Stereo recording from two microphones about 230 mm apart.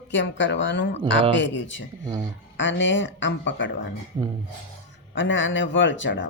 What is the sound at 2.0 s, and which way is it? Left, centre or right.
Speech, centre.